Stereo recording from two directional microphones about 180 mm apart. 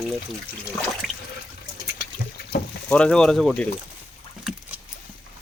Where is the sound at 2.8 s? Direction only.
5° left (ahead or behind).